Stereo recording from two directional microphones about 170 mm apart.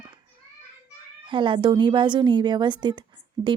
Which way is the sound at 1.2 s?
30° right (ahead or behind).